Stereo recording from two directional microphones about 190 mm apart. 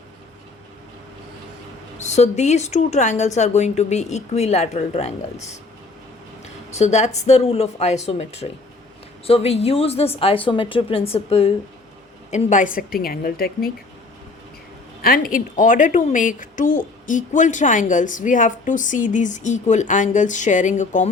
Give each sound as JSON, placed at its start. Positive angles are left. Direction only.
{"t": 2.0, "sound": "speech", "side_deg": 35}
{"t": 6.7, "sound": "a woman's voice", "side_deg": 35}
{"t": 15.0, "sound": "speech", "side_deg": 50}